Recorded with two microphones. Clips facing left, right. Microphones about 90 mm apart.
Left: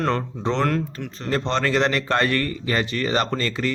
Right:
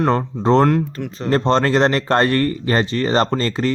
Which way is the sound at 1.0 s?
15° right (ahead or behind).